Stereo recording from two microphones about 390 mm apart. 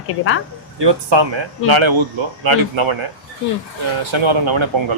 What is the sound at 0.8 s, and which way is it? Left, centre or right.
Speech, right.